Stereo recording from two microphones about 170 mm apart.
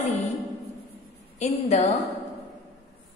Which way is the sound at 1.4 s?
40° left (ahead or behind).